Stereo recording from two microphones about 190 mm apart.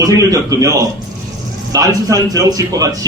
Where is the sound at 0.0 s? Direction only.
20° right (ahead or behind).